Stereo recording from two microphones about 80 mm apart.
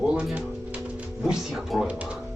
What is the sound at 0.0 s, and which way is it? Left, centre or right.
Music, centre.